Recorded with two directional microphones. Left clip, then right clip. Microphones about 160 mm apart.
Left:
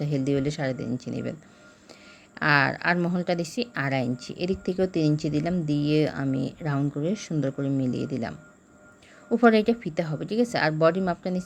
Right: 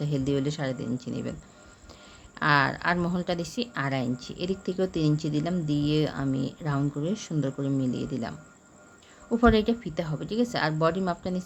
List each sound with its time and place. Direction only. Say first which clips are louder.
0.0 s a woman's voice: left 2 dB; 15° left (ahead or behind)